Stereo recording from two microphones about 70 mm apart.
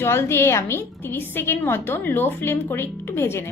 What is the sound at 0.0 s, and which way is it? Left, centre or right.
A woman's voice, left.